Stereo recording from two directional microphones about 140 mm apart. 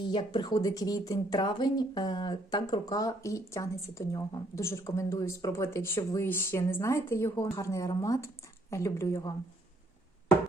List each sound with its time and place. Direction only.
0.1 s speech: 35° left (ahead or behind)